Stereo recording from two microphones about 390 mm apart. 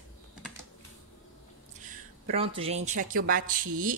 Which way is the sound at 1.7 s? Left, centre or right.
Centre.